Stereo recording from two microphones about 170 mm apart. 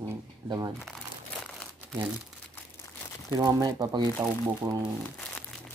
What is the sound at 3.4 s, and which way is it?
Speech, 20° right (ahead or behind).